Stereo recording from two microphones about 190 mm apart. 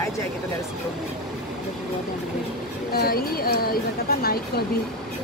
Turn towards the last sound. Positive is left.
turn(degrees=55)  # may be behind; listen again after turning